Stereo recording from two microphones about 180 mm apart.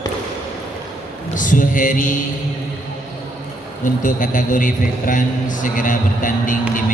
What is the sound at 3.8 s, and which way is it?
A man's voice, 45° left (ahead or behind).